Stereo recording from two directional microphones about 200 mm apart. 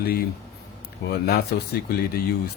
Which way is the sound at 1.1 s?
55° left (ahead or behind).